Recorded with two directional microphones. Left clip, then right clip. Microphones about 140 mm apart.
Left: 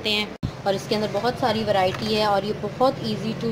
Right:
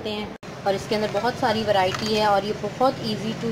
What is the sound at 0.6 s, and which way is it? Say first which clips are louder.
Speech: even; 20° left (ahead or behind).